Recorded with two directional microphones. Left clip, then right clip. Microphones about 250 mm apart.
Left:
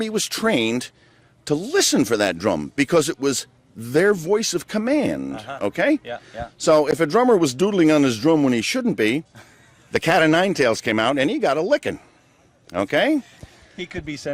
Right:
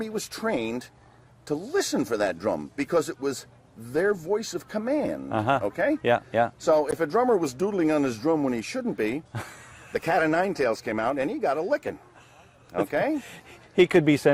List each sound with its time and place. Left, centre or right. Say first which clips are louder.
0.0 s speech: left 8 dB; left
14.0 s speech: right 10 dB; right